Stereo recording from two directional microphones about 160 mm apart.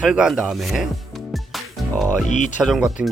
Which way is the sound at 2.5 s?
5° right (ahead or behind).